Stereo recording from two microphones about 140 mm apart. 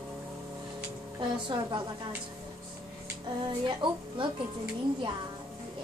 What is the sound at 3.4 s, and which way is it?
Speech, 35° right (ahead or behind).